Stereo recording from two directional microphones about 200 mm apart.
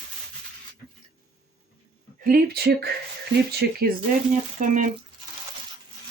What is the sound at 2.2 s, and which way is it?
Speech, 45° right (ahead or behind).